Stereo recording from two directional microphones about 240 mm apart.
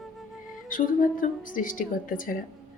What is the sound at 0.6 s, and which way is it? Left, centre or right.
Speech, left.